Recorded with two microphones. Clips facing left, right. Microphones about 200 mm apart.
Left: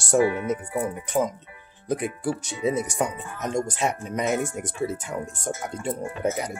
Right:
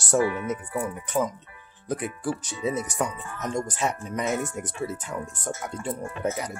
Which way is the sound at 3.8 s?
20° left (ahead or behind).